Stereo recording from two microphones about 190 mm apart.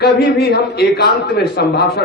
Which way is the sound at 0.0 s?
55° left (ahead or behind).